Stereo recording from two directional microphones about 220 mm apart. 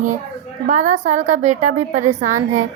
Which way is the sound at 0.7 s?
35° right (ahead or behind).